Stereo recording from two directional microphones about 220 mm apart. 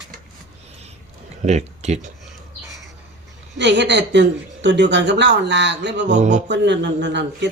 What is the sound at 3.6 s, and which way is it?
Speech, 55° right (ahead or behind).